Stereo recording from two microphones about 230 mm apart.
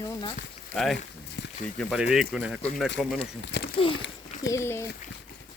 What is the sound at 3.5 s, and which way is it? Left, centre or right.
Speech, left.